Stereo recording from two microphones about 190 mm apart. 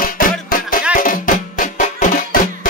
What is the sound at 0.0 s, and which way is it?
Music, 45° left (ahead or behind).